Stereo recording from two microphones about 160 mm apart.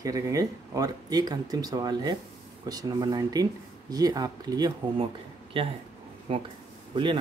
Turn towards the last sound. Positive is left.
turn(degrees=-30)  # may be behind; listen again after turning